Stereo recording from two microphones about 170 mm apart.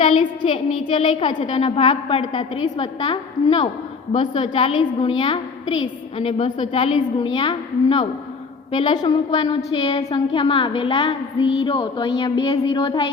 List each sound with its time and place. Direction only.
0.0 s child singing: 30° left (ahead or behind)
0.9 s a woman's voice: 30° left (ahead or behind)